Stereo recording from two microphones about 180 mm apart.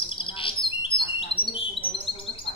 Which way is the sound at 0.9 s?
30° left (ahead or behind).